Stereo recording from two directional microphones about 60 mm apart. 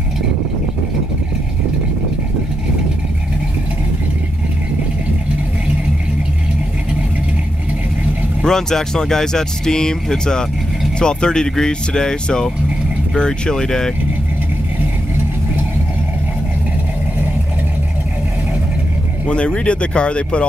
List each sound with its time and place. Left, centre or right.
8.5 s speech: centre
19.2 s speech: centre